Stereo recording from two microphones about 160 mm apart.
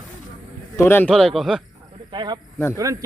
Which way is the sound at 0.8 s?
15° left (ahead or behind).